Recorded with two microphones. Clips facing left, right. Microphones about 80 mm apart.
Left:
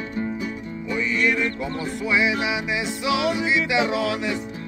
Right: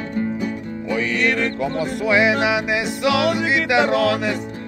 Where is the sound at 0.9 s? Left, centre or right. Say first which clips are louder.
Right 2 dB; right.